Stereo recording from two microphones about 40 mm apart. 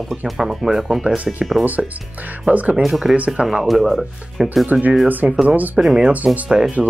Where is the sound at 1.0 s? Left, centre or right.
Right.